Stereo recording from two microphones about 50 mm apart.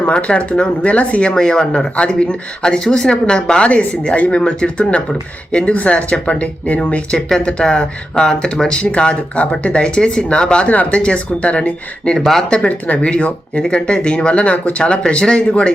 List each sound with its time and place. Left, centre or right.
0.1 s speech: left
1.3 s speech: centre
12.1 s speech: centre
12.5 s speech: left